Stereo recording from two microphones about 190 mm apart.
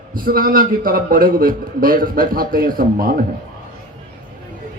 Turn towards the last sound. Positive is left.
turn(degrees=-50)  # may be behind; listen again after turning